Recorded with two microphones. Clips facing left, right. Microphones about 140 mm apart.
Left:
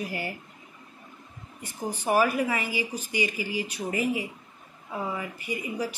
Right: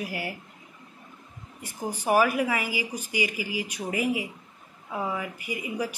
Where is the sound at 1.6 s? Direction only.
10° right (ahead or behind).